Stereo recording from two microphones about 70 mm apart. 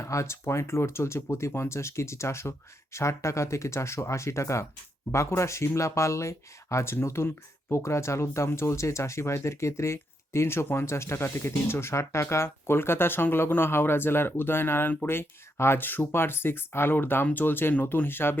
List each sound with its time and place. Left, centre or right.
0.0 s speech: left